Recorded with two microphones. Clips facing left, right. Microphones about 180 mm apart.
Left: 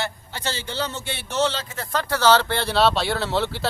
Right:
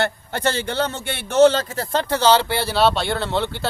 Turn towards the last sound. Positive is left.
turn(degrees=0)  # may be behind; listen again after turning